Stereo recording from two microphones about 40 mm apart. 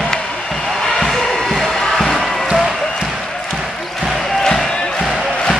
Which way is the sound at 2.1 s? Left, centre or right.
Centre.